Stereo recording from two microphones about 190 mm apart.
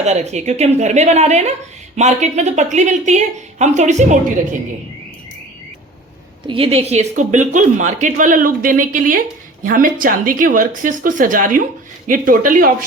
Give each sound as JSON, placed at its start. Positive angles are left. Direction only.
{"t": 0.0, "sound": "a woman's voice", "side_deg": -35}
{"t": 6.5, "sound": "a woman's voice", "side_deg": -30}